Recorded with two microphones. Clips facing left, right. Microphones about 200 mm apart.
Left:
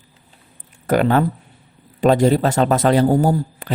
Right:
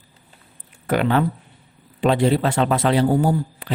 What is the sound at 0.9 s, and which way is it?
A man's voice, 45° left (ahead or behind).